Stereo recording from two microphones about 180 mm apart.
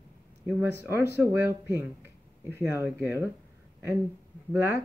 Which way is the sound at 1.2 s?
15° right (ahead or behind).